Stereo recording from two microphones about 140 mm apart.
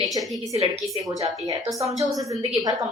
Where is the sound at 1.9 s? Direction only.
25° right (ahead or behind).